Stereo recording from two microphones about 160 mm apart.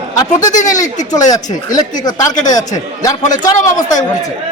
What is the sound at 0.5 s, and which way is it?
Speech, 50° left (ahead or behind).